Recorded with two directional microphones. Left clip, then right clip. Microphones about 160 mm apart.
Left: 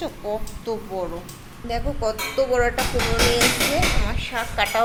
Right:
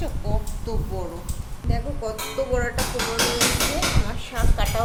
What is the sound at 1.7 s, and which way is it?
Speech, 25° left (ahead or behind).